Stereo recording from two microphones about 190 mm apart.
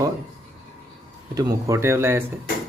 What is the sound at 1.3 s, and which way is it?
Speech, 20° right (ahead or behind).